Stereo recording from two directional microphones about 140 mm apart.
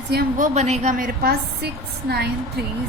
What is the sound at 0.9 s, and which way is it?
Speech, 85° right.